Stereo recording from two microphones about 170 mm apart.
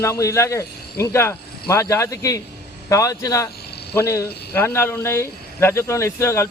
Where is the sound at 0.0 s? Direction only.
20° left (ahead or behind).